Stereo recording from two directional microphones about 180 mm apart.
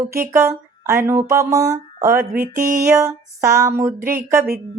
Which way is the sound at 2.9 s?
15° right (ahead or behind).